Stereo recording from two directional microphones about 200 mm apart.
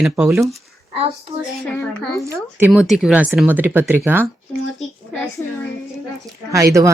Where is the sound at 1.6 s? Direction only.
5° left (ahead or behind); by 4.3 s 10° right (ahead or behind).